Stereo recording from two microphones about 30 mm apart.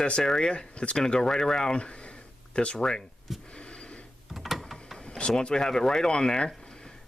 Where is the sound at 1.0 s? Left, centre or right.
Left.